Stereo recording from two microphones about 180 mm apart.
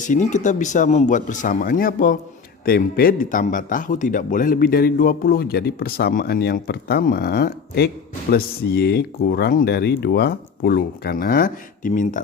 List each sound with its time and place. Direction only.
0.0 s speech: 45° left (ahead or behind)